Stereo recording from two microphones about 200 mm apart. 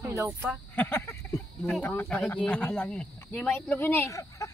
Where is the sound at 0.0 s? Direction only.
15° right (ahead or behind).